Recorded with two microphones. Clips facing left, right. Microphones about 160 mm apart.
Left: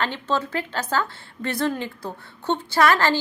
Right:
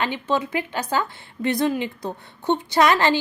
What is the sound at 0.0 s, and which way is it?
A woman's voice, 15° right (ahead or behind).